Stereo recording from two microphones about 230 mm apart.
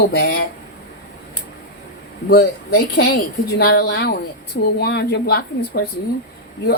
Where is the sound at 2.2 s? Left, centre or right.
Left.